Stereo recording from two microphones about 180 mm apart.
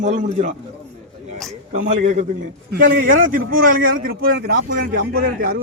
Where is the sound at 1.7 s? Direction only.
45° right (ahead or behind).